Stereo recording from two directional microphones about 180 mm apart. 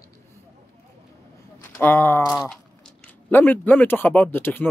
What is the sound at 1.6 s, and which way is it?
Speech, 15° left (ahead or behind).